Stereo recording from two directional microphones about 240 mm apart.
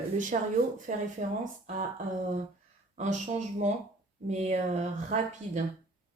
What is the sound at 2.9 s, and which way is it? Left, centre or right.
Speech, right.